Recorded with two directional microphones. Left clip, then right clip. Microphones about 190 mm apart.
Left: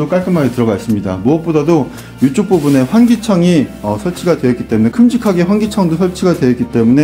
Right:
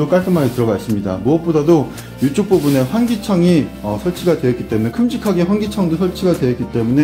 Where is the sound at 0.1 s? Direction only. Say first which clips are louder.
Left 1 dB; 15° left (ahead or behind).